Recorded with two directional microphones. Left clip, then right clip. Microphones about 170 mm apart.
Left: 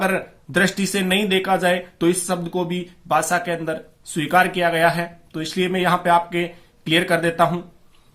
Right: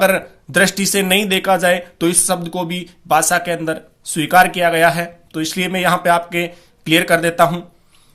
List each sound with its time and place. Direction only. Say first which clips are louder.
0.0 s speech: right 7 dB; 35° right (ahead or behind)